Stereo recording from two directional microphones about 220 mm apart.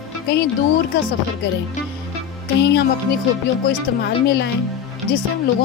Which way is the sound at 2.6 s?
50° left (ahead or behind).